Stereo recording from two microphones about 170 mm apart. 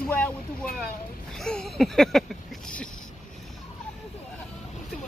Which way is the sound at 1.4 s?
5° left (ahead or behind).